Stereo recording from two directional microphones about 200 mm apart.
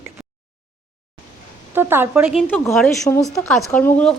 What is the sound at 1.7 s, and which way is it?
Speech, 10° right (ahead or behind).